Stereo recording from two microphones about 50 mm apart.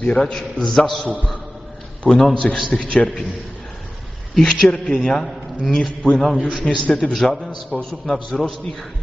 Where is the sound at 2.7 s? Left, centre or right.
Centre.